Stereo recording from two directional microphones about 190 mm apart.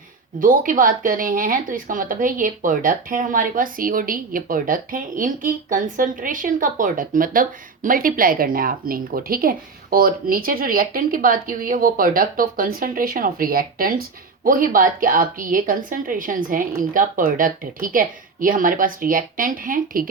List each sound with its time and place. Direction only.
0.3 s speech: 45° right (ahead or behind)